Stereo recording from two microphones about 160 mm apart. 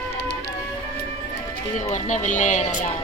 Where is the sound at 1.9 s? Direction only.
50° left (ahead or behind).